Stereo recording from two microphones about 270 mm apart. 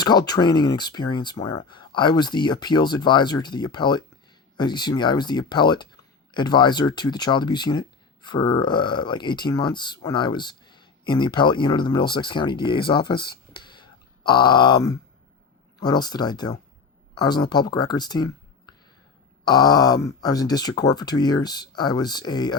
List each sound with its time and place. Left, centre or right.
0.0 s speech: centre
19.5 s speech: centre